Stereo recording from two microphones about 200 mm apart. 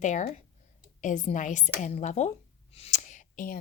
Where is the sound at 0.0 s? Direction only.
35° left (ahead or behind).